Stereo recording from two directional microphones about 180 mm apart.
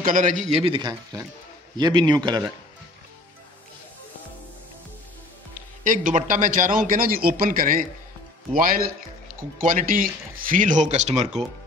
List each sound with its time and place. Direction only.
0.0 s a man's voice: 45° right (ahead or behind); by 2.5 s 25° right (ahead or behind)
5.5 s a man's voice: 45° right (ahead or behind)